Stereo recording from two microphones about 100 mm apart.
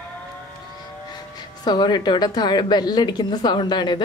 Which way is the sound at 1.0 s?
45° left (ahead or behind).